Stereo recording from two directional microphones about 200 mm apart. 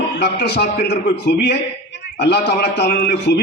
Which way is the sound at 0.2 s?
55° left (ahead or behind).